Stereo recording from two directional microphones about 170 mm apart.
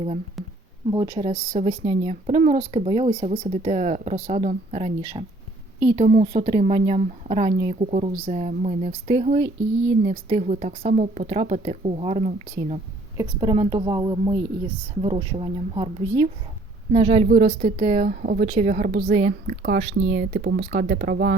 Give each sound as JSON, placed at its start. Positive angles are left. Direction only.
{"t": 0.4, "sound": "a sound", "side_deg": 0}
{"t": 0.9, "sound": "a woman's voice", "side_deg": -30}
{"t": 13.1, "sound": "a woman's voice", "side_deg": -25}
{"t": 17.2, "sound": "a woman's voice", "side_deg": -50}